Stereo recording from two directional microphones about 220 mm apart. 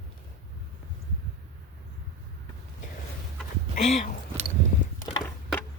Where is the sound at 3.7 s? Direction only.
30° left (ahead or behind).